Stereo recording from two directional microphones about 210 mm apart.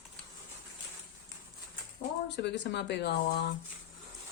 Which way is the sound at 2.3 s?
55° left (ahead or behind).